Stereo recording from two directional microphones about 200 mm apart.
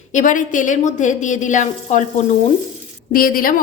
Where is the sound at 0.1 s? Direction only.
40° left (ahead or behind).